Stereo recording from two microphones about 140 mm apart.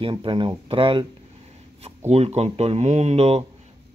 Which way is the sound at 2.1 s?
50° right (ahead or behind).